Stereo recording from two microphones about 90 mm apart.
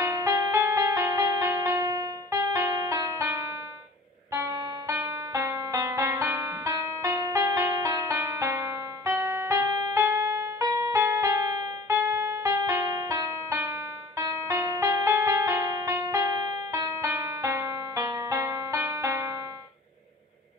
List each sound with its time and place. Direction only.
0.0 s music: 35° right (ahead or behind)